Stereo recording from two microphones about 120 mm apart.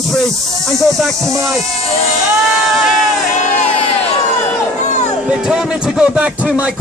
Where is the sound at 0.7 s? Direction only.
Centre (ahead or behind).